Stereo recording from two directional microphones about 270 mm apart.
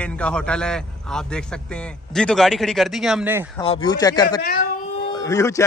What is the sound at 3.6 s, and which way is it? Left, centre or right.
A man's voice, centre.